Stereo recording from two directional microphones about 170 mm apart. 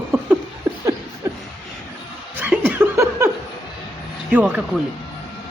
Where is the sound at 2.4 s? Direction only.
10° right (ahead or behind).